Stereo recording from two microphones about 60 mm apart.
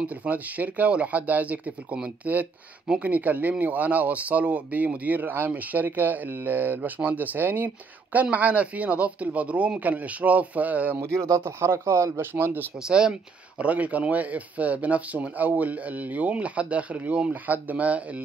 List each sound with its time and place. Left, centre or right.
0.0 s speech: right
11.0 s speech: right
11.4 s speech: right
12.2 s speech: right
12.8 s speech: centre